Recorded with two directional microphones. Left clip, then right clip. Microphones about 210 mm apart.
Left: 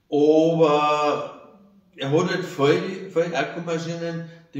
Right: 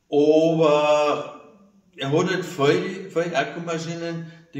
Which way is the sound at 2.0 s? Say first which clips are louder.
Even; 20° right (ahead or behind).